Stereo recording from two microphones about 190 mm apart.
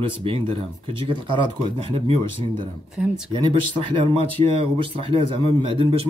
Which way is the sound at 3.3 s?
25° right (ahead or behind).